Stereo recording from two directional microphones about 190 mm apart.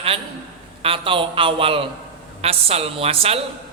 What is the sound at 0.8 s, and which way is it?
A man's voice, 30° right (ahead or behind).